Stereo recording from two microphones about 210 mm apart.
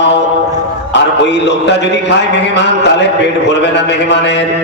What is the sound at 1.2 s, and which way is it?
Music, 55° left (ahead or behind).